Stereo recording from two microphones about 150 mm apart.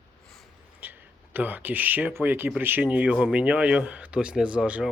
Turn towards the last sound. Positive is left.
turn(degrees=-5)  # may be behind; listen again after turning